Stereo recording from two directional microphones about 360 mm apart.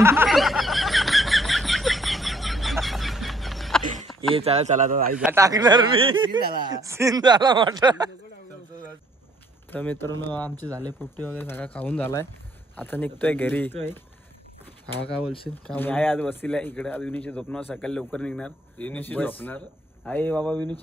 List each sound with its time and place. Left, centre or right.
0.0 s a sound: centre
4.4 s speech: centre
5.1 s speech: centre
9.7 s speech: centre
15.6 s speech: centre